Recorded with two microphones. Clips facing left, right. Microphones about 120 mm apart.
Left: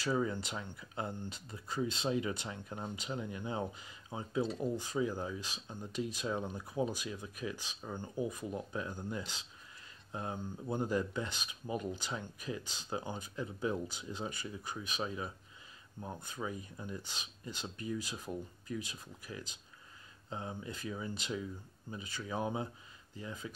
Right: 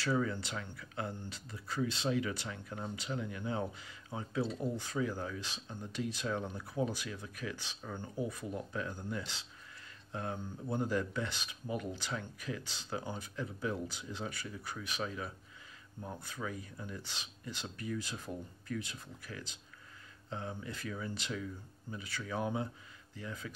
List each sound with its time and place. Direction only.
0.0 s speech: 15° left (ahead or behind)